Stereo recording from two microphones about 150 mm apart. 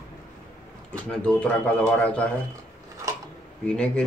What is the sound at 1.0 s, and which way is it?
Speech, 5° left (ahead or behind).